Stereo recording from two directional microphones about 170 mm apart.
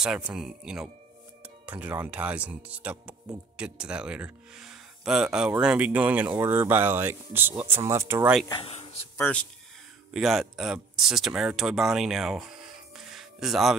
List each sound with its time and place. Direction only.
0.0 s speech: 5° right (ahead or behind)
8.5 s speech: 30° left (ahead or behind)
9.1 s speech: 10° left (ahead or behind)
12.9 s music: centre (ahead or behind)